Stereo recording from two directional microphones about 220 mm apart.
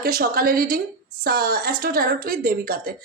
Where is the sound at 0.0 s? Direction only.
40° right (ahead or behind).